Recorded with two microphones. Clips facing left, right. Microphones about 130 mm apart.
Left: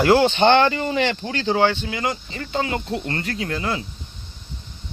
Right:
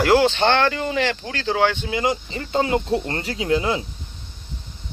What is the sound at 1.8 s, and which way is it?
Speech, 20° right (ahead or behind).